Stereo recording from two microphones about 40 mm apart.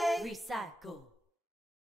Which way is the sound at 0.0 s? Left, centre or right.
Centre.